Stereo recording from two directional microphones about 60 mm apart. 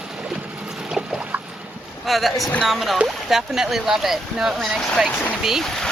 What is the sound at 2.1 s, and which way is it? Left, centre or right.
Speech, centre.